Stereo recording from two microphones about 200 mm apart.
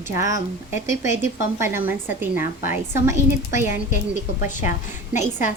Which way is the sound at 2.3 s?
40° left (ahead or behind).